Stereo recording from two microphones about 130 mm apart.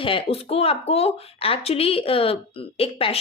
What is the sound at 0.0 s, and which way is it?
A woman's voice, 45° left (ahead or behind).